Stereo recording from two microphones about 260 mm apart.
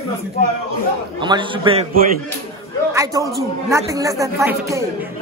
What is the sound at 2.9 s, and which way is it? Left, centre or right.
A man's voice, centre.